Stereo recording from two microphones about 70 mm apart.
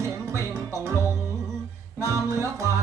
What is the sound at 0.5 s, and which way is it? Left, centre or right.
Music, right.